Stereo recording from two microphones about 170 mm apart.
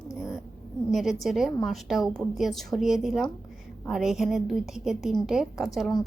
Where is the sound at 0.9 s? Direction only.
Centre (ahead or behind).